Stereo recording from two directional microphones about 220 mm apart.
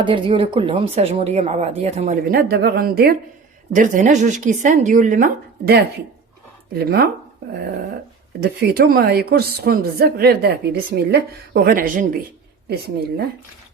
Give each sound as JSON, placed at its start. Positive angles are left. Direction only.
{"t": 0.0, "sound": "a woman's voice", "side_deg": -25}
{"t": 8.4, "sound": "a woman's voice", "side_deg": -45}